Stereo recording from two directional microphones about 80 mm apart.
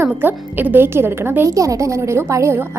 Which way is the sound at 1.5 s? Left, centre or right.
Right.